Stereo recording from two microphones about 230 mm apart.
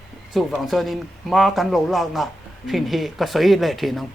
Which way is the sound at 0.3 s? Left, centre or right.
Centre.